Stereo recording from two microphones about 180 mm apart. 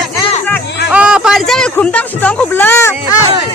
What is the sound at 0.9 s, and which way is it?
Speech, 5° right (ahead or behind).